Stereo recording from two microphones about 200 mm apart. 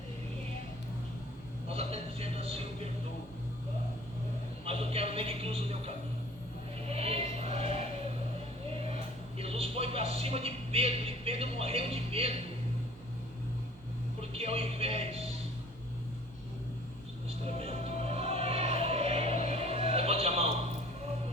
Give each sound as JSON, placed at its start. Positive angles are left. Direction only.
{"t": 1.7, "sound": "music", "side_deg": -30}
{"t": 4.6, "sound": "speech", "side_deg": -30}
{"t": 6.8, "sound": "a sound", "side_deg": -30}
{"t": 9.4, "sound": "a sound", "side_deg": -30}
{"t": 14.2, "sound": "music", "side_deg": -30}
{"t": 17.6, "sound": "music", "side_deg": -30}